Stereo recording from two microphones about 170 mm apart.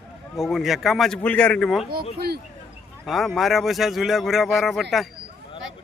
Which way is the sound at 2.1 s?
70° right (ahead or behind).